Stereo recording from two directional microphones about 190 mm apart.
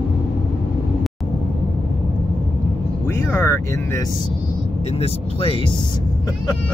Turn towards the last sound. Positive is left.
turn(degrees=30)  # may be behind; listen again after turning